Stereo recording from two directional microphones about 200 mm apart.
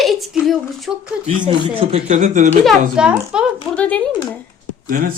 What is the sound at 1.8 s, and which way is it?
Speech, 35° right (ahead or behind).